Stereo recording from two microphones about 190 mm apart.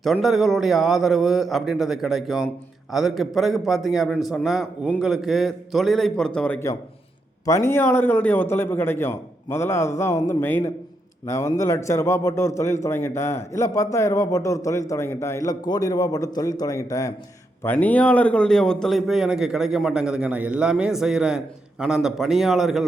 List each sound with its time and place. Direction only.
0.0 s a man's voice: centre (ahead or behind)